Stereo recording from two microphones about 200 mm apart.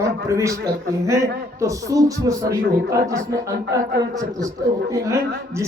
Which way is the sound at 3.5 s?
55° right (ahead or behind).